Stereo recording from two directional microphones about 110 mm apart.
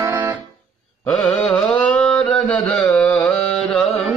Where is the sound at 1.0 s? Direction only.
5° left (ahead or behind).